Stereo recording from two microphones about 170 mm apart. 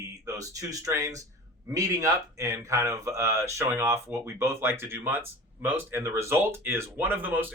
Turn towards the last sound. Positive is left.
turn(degrees=-10)  # may be behind; listen again after turning